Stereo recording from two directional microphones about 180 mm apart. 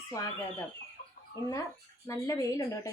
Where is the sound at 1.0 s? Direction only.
55° left (ahead or behind).